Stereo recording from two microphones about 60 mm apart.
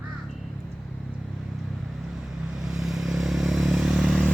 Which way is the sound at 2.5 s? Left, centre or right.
Centre.